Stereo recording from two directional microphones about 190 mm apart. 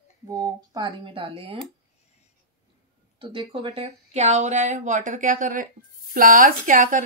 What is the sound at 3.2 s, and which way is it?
Speech, 25° right (ahead or behind).